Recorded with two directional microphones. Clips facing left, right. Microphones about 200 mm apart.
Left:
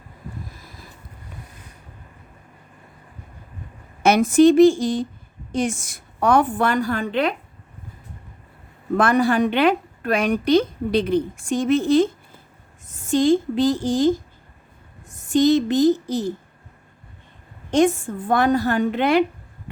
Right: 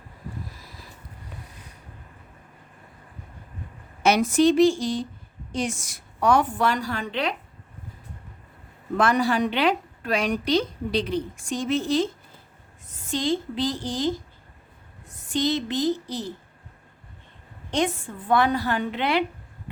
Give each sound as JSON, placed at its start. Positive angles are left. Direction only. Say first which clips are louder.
{"t": 4.0, "sound": "a woman's voice", "louder": "left 5 dB", "side_deg": 50}
{"t": 9.0, "sound": "a woman's voice", "louder": "left 4 dB", "side_deg": 55}
{"t": 17.7, "sound": "a woman's voice", "louder": "left 8 dB", "side_deg": 45}